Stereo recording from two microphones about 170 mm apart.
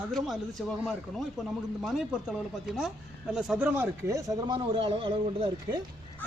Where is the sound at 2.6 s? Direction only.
Centre (ahead or behind); by 5.8 s 30° right (ahead or behind).